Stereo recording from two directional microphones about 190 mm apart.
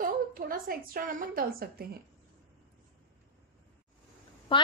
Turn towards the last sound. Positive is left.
turn(degrees=25)  # may be behind; listen again after turning